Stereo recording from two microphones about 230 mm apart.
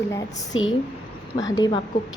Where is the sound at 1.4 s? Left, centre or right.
Centre.